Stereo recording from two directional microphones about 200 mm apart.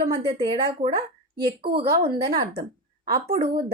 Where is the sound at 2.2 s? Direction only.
20° right (ahead or behind).